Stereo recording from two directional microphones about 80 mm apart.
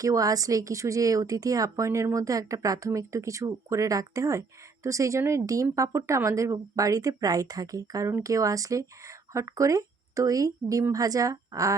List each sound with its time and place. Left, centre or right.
0.0 s speech: right